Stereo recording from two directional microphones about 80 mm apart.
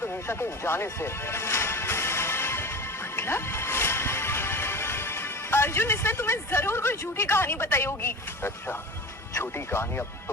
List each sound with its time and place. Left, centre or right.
0.0 s music: left
9.3 s speech: left